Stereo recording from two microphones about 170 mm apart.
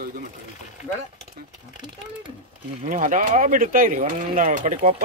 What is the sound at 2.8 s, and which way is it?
Speech, 50° right (ahead or behind).